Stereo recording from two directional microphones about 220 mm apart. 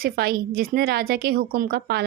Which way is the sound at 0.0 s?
45° right (ahead or behind).